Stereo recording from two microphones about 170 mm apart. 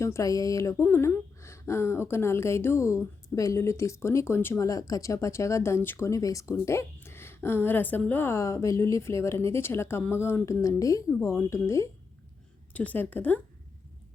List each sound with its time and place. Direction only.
0.0 s a woman's voice: 20° left (ahead or behind)